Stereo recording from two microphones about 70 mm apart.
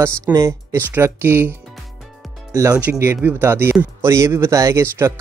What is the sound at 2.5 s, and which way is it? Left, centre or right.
Speech, right.